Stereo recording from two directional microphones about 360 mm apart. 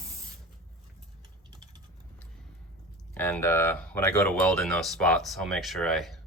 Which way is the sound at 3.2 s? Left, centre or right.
Centre.